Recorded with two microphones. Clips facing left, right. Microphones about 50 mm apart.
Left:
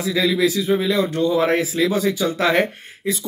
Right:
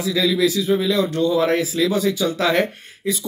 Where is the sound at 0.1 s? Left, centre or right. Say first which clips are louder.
Even; left.